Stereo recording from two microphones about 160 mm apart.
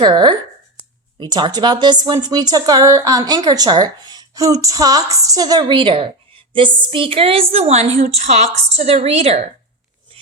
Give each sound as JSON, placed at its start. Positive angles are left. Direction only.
{"t": 0.0, "sound": "speech", "side_deg": -30}